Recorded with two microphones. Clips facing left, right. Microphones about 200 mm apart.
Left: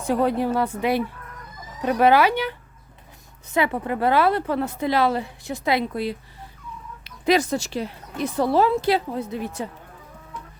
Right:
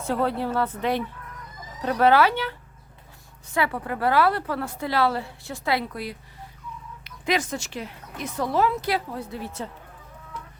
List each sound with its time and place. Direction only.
0.0 s a woman's voice: 15° left (ahead or behind)
7.0 s a woman's voice: 35° left (ahead or behind); by 9.6 s 15° left (ahead or behind)